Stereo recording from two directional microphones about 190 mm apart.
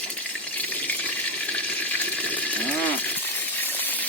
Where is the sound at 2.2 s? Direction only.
10° left (ahead or behind).